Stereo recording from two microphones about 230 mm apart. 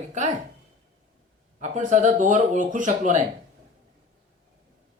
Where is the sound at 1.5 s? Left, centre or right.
Right.